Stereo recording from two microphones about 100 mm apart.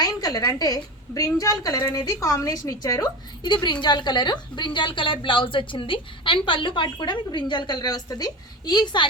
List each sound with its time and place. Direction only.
0.0 s a woman's voice: 40° left (ahead or behind)